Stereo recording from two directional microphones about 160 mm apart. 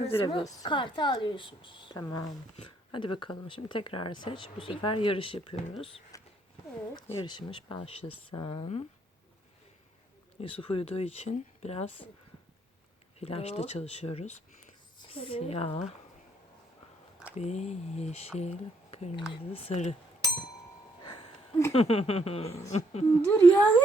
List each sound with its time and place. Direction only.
0.0 s speech: 35° left (ahead or behind)
0.4 s speech: 25° left (ahead or behind)
6.1 s a sound: 20° left (ahead or behind)
6.9 s speech: 30° left (ahead or behind)
10.4 s speech: 35° left (ahead or behind)
13.1 s a woman's voice: 40° left (ahead or behind)
17.3 s speech: 45° left (ahead or behind)
21.7 s speech: 40° left (ahead or behind)
22.4 s speech: 20° left (ahead or behind)
22.7 s speech: 40° left (ahead or behind)
23.2 s speech: 10° left (ahead or behind)